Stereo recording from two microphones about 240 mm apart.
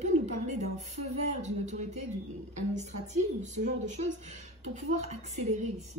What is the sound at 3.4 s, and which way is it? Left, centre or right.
A woman's voice, right.